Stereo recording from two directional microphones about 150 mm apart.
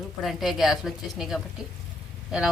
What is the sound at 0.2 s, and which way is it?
A woman's voice, centre (ahead or behind).